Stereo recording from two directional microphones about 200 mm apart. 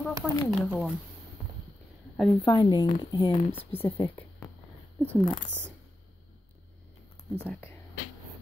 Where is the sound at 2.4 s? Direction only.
25° left (ahead or behind).